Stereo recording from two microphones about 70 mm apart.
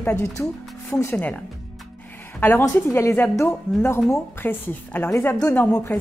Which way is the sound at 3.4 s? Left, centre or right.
Left.